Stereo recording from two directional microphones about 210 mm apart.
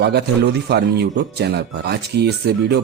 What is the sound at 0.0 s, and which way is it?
Speech, 50° right (ahead or behind).